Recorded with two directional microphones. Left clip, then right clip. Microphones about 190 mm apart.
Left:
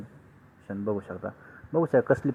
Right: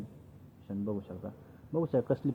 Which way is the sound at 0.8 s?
50° left (ahead or behind).